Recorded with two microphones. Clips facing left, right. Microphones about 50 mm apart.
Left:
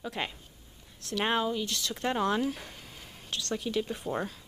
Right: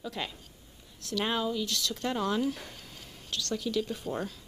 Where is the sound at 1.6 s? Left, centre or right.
Centre.